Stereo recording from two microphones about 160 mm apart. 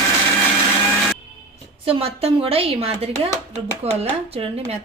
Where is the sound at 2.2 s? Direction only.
35° right (ahead or behind).